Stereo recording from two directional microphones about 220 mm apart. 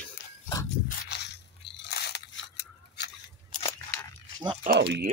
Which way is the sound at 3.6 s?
15° left (ahead or behind).